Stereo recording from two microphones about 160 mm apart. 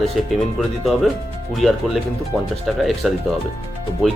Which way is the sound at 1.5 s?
Centre (ahead or behind).